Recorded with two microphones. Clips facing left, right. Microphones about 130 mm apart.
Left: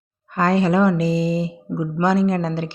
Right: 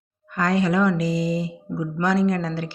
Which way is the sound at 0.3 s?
30° left (ahead or behind).